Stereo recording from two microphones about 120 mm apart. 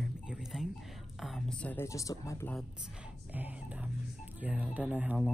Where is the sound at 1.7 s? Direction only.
25° left (ahead or behind).